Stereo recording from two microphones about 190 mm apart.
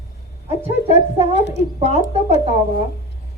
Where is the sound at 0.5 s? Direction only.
35° left (ahead or behind).